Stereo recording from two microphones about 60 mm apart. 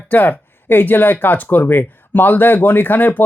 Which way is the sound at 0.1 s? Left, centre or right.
Left.